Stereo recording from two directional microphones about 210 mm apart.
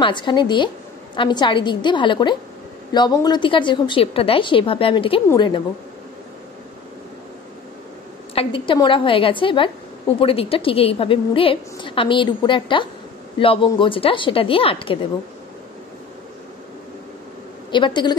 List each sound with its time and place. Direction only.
0.0 s a woman's voice: 20° left (ahead or behind)
8.4 s a woman's voice: 25° left (ahead or behind)
17.6 s a woman's voice: 20° left (ahead or behind)